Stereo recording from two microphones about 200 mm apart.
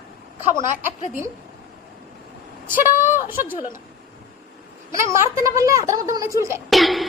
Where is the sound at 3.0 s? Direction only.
10° right (ahead or behind).